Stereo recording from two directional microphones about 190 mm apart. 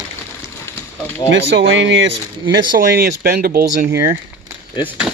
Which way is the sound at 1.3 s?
75° right (ahead or behind).